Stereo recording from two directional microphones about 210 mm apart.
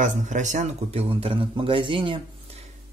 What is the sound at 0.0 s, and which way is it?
A man's voice, 35° right (ahead or behind).